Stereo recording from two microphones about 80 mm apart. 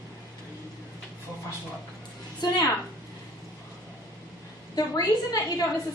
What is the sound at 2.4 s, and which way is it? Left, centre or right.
Speech, left.